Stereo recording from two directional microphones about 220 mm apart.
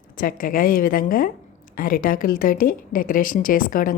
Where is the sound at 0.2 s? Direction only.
40° left (ahead or behind).